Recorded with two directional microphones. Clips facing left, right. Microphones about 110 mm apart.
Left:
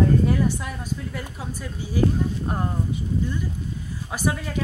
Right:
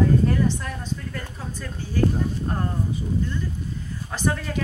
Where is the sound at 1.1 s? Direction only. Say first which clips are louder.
Left 1 dB; 10° left (ahead or behind).